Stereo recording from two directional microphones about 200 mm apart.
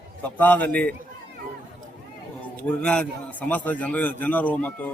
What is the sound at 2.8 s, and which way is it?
A man's voice, 5° left (ahead or behind).